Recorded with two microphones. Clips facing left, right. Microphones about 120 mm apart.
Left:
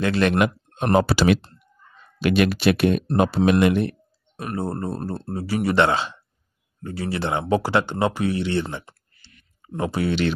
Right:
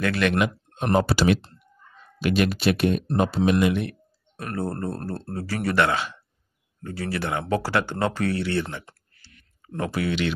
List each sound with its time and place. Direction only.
0.0 s speech: 30° left (ahead or behind)
0.9 s speech: 90° left
2.1 s speech: 75° left (ahead or behind)
4.4 s speech: 20° left (ahead or behind)
8.8 s clicking: 10° left (ahead or behind)
9.8 s speech: 30° left (ahead or behind)